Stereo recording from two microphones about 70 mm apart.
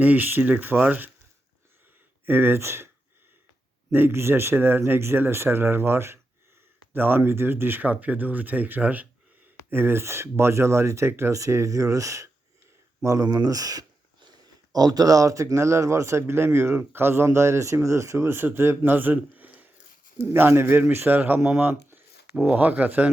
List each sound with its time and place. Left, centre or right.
0.0 s speech: right
2.2 s speech: right
3.9 s speech: right
13.3 s a man's voice: right